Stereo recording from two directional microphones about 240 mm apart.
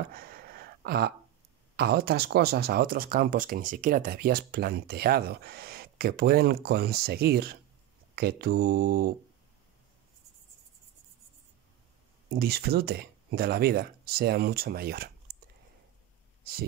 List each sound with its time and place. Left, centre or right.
0.1 s a sound: right
1.8 s speech: right
12.3 s speech: right